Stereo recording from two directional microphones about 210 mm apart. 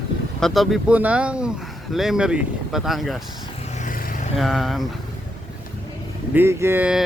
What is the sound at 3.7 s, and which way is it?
Vehicle, 40° left (ahead or behind).